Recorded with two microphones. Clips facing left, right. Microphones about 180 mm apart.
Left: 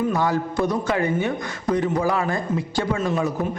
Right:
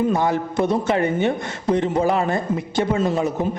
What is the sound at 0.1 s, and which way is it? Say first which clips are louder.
A man's voice: right 2 dB; 20° right (ahead or behind).